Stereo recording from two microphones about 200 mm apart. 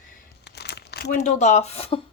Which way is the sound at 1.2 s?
35° left (ahead or behind).